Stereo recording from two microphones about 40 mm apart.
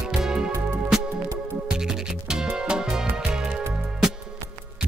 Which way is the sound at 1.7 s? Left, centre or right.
Centre.